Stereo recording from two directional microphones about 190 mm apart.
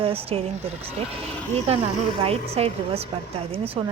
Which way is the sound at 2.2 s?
30° right (ahead or behind).